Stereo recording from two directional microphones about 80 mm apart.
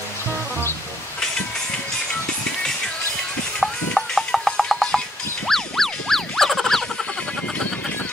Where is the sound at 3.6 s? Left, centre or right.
Centre.